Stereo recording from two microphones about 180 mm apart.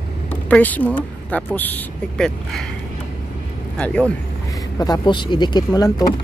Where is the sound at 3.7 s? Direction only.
5° left (ahead or behind).